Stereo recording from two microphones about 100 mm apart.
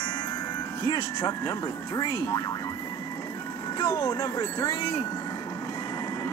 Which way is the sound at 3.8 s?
30° left (ahead or behind).